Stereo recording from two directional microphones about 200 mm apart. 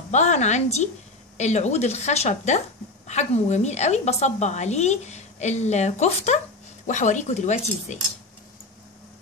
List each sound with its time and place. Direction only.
0.1 s a woman's voice: 35° left (ahead or behind)